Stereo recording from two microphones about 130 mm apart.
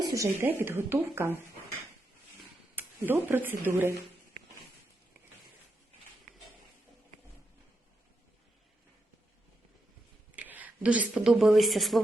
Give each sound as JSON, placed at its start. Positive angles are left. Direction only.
{"t": 0.0, "sound": "a woman's voice", "side_deg": -25}
{"t": 2.7, "sound": "speech", "side_deg": -15}
{"t": 10.3, "sound": "speech", "side_deg": -10}